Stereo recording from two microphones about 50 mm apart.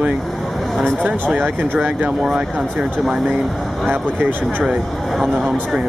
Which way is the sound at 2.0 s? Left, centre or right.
Centre.